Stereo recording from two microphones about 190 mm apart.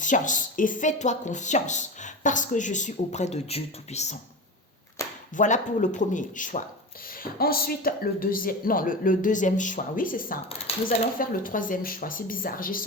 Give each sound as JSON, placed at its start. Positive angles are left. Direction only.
{"t": 0.0, "sound": "speech", "side_deg": 40}
{"t": 5.4, "sound": "speech", "side_deg": 40}